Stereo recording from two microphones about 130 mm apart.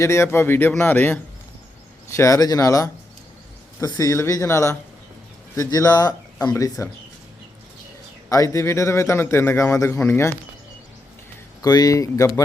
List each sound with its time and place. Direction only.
0.0 s a man's voice: 20° left (ahead or behind)
8.3 s a man's voice: 25° left (ahead or behind)
11.6 s a man's voice: 30° left (ahead or behind)